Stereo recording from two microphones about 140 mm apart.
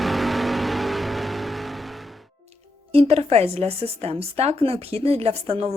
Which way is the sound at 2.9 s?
45° right (ahead or behind).